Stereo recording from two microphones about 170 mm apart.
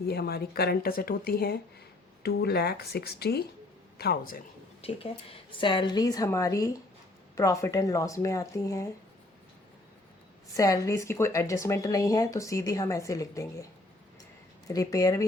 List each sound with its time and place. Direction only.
0.1 s speech: 70° left (ahead or behind)
4.8 s speech: 35° left (ahead or behind); by 8.9 s 20° left (ahead or behind)
10.6 s speech: 20° left (ahead or behind)
14.7 s speech: 20° left (ahead or behind)